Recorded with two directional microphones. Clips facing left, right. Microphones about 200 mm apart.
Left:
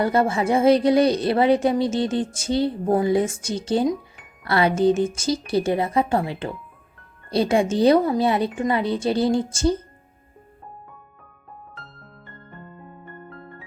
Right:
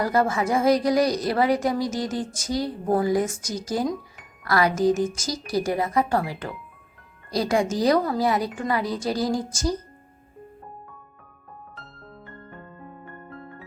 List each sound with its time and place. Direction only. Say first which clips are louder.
0.0 s speech: left 2 dB; 25° left (ahead or behind)
12.2 s music: left 1 dB; centre (ahead or behind)